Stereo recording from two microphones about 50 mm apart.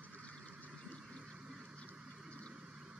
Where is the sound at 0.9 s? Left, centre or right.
Centre.